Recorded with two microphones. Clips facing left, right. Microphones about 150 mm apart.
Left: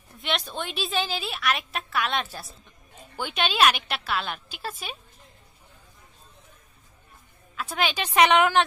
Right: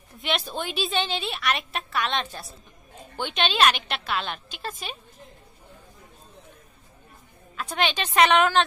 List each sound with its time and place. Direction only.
0.2 s a woman's voice: centre (ahead or behind)
7.5 s a woman's voice: 5° left (ahead or behind)